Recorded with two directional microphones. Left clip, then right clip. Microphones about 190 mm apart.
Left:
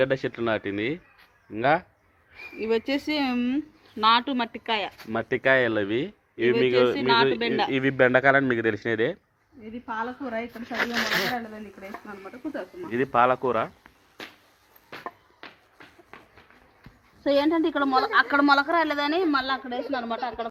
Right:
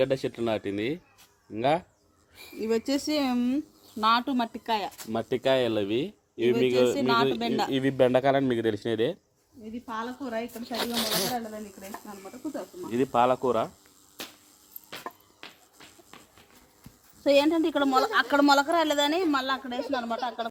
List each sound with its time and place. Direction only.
0.0 s speech: 10° right (ahead or behind)
2.6 s speech: 60° right (ahead or behind); by 4.9 s 45° right (ahead or behind)
4.9 s speech: 15° right (ahead or behind)
7.3 s speech: 65° right (ahead or behind)
7.7 s speech: 15° right (ahead or behind)
9.8 s speech: 55° right (ahead or behind)
10.6 s speech: 15° right (ahead or behind)
11.3 s speech: 35° right (ahead or behind)
13.1 s speech: 10° right (ahead or behind)
16.1 s a sound: 30° left (ahead or behind)
17.5 s speech: 35° right (ahead or behind)
18.3 s speech: 90° right
19.7 s speech: 45° right (ahead or behind)
20.1 s speech: 20° right (ahead or behind)